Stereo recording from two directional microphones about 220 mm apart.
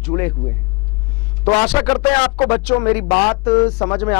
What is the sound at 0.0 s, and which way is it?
Speech, 15° left (ahead or behind).